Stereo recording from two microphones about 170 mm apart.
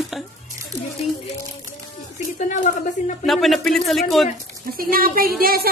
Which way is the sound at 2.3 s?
50° left (ahead or behind).